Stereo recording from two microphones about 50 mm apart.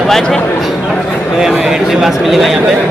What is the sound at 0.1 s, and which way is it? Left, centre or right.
Speech, centre.